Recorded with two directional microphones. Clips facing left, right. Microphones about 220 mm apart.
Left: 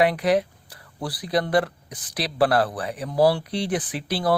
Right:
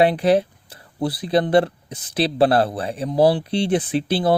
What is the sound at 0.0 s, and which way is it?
Speech, 30° right (ahead or behind).